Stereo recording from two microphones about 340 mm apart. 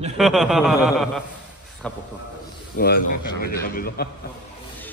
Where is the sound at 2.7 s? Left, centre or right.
Left.